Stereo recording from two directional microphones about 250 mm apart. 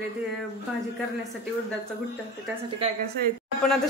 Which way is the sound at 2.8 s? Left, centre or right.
Right.